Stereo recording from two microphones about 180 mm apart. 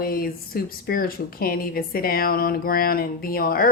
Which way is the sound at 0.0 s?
55° left (ahead or behind).